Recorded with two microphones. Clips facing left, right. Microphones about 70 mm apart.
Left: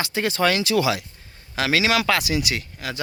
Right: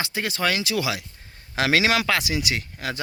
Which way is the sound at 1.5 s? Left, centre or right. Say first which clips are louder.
Even; right.